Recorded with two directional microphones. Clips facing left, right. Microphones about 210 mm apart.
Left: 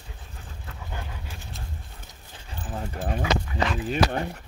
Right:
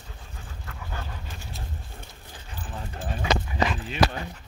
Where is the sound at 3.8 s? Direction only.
50° left (ahead or behind).